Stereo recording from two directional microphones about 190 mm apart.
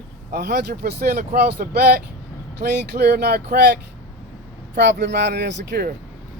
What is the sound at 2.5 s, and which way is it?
Speech, 60° right (ahead or behind).